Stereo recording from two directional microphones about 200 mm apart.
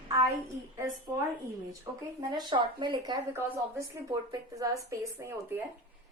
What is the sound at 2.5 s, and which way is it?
Speech, 25° right (ahead or behind).